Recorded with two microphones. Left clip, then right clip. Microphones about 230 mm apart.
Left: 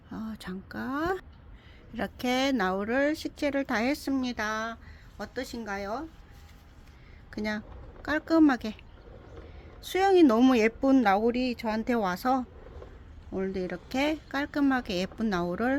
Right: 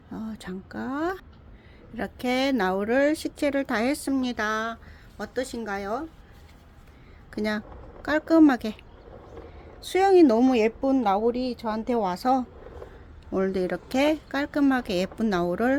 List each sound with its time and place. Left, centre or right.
0.1 s speech: centre
7.3 s speech: centre
9.8 s speech: centre
13.3 s speech: centre